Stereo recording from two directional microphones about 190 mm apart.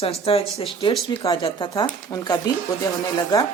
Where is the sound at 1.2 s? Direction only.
20° left (ahead or behind).